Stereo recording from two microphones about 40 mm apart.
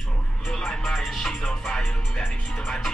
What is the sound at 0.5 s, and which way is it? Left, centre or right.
Music, centre.